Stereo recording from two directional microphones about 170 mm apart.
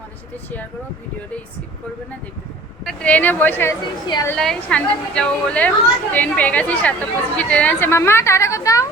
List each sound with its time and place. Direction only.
2.8 s a woman's voice: 5° left (ahead or behind)
4.4 s a woman's voice: 5° left (ahead or behind)